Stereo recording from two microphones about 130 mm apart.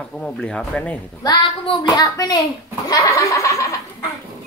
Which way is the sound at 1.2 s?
35° left (ahead or behind).